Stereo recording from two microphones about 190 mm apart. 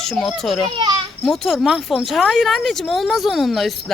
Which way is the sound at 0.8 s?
20° right (ahead or behind).